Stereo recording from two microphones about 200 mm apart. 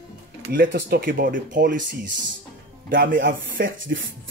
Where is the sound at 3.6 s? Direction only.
70° right (ahead or behind).